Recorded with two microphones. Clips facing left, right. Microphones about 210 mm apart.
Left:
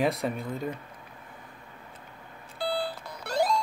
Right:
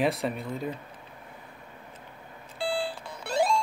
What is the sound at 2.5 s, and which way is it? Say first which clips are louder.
Alarm clock: even; 30° right (ahead or behind).